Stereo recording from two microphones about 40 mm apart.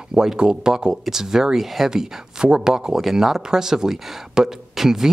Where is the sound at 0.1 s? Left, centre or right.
Centre.